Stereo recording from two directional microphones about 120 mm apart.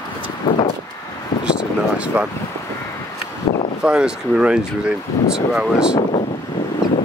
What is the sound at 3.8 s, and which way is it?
Speech, 10° right (ahead or behind).